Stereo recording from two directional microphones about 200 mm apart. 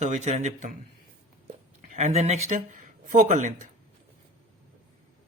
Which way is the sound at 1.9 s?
35° right (ahead or behind).